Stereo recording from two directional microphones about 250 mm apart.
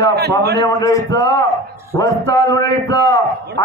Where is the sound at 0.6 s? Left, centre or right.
Centre.